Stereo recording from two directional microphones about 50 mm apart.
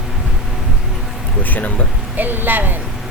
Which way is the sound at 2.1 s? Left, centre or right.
Right.